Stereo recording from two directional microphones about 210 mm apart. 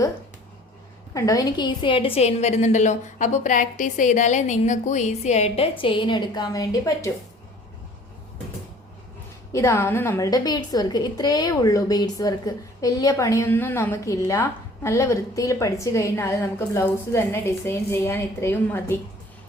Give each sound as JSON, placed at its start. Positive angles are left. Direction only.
{"t": 1.1, "sound": "a woman's voice", "side_deg": 15}
{"t": 9.5, "sound": "a woman's voice", "side_deg": 15}